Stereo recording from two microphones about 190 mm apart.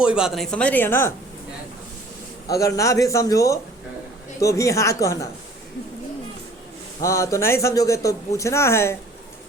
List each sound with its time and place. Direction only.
0.0 s speech: 5° right (ahead or behind); by 1.1 s 10° left (ahead or behind)
2.5 s a man's voice: 15° left (ahead or behind)
7.0 s a man's voice: 15° left (ahead or behind)